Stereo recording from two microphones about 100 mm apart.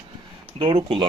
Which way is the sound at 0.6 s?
75° right (ahead or behind).